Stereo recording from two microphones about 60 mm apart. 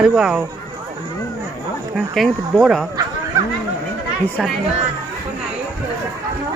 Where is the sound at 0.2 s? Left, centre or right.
Centre.